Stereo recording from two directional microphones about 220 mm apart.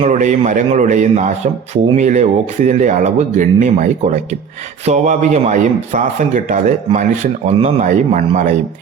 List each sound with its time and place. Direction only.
0.0 s speech: 35° right (ahead or behind)